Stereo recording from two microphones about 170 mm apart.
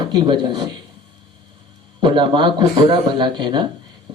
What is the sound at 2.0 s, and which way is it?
Speech, 30° right (ahead or behind).